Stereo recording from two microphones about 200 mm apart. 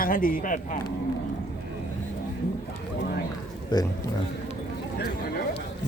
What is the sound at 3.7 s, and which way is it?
Speech, 20° left (ahead or behind).